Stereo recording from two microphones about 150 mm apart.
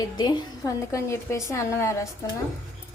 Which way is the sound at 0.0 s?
30° left (ahead or behind).